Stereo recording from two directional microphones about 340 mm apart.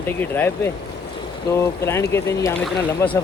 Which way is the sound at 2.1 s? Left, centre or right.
Centre.